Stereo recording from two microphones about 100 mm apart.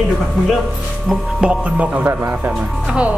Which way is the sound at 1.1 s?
10° right (ahead or behind).